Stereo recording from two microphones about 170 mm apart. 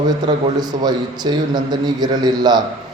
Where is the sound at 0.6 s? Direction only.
25° right (ahead or behind).